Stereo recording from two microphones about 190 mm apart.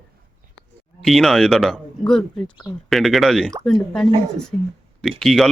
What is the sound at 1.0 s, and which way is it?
Speech, centre (ahead or behind).